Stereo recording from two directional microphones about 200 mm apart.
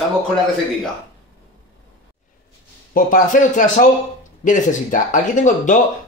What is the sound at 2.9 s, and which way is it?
Speech, 40° left (ahead or behind).